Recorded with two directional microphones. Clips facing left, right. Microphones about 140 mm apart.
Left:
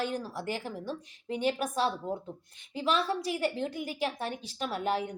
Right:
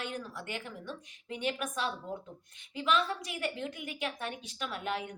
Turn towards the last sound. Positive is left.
turn(degrees=35)  # may be behind; listen again after turning